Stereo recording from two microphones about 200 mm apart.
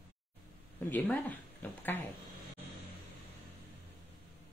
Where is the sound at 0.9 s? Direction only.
10° left (ahead or behind).